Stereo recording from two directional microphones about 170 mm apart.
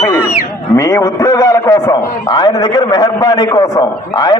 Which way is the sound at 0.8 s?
20° left (ahead or behind).